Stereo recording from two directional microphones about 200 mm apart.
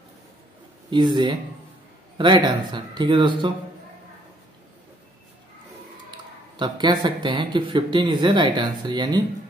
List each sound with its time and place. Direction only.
0.8 s a man's voice: 25° right (ahead or behind)
6.5 s a man's voice: 20° right (ahead or behind)